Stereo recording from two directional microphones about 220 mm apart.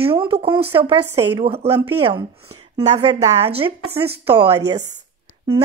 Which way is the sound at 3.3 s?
25° right (ahead or behind).